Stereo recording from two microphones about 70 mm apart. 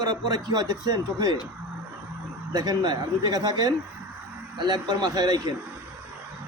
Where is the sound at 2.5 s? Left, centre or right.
Right.